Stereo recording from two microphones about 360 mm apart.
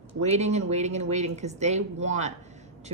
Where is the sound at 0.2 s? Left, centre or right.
Centre.